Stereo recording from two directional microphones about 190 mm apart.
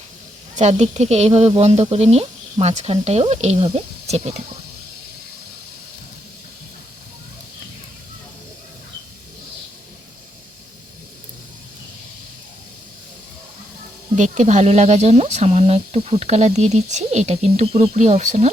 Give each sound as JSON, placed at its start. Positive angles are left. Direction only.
{"t": 0.5, "sound": "speech", "side_deg": -35}
{"t": 14.2, "sound": "speech", "side_deg": -40}